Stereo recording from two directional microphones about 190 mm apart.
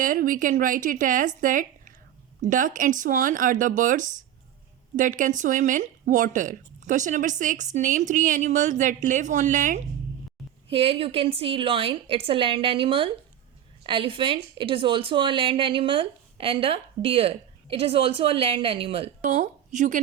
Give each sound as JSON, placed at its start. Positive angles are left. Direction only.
{"t": 0.0, "sound": "speech", "side_deg": -45}
{"t": 10.7, "sound": "a woman's voice", "side_deg": -30}
{"t": 19.2, "sound": "a woman's voice", "side_deg": -40}